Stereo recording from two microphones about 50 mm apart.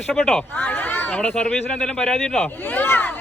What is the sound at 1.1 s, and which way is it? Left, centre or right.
Speech, left.